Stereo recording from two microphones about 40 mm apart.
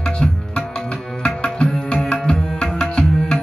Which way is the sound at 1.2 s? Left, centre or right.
Left.